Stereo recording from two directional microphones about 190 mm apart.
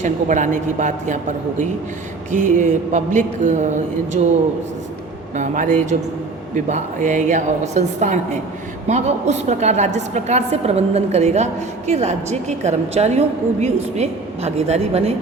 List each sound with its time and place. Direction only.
0.0 s a woman's voice: 40° right (ahead or behind)
5.3 s a woman's voice: 40° right (ahead or behind)